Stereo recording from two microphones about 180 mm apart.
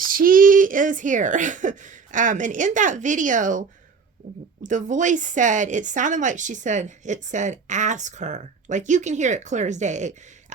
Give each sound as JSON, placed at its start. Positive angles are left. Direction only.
{"t": 0.0, "sound": "a woman's voice", "side_deg": -50}